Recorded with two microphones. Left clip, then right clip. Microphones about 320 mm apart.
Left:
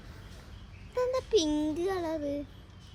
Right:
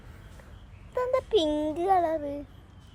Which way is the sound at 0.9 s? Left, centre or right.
Centre.